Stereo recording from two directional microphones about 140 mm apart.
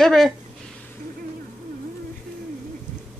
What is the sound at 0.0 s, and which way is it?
Speech, centre (ahead or behind).